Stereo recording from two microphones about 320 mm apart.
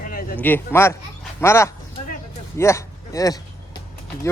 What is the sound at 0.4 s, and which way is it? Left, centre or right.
A man's voice, centre.